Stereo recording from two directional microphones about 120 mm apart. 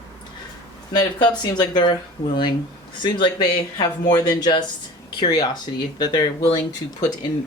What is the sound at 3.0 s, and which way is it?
Speech, 40° left (ahead or behind).